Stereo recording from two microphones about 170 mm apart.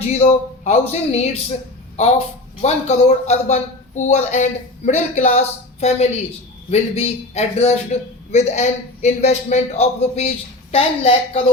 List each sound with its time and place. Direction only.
0.0 s a man's voice: 40° left (ahead or behind)